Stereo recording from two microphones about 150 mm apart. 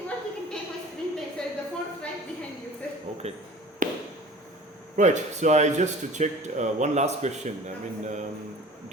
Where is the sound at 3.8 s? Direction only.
65° right (ahead or behind).